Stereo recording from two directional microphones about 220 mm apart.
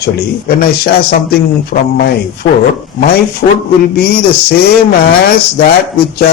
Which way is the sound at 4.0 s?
45° left (ahead or behind).